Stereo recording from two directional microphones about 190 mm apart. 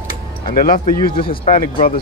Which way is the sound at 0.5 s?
45° left (ahead or behind).